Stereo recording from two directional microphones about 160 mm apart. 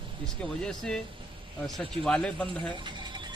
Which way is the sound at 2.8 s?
30° right (ahead or behind).